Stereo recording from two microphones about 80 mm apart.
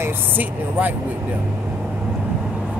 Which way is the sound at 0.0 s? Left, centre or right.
Right.